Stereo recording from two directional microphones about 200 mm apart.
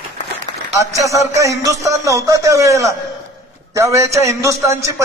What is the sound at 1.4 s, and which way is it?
A man's voice, 15° right (ahead or behind).